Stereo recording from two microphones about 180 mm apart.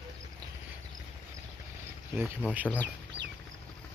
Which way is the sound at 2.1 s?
10° right (ahead or behind).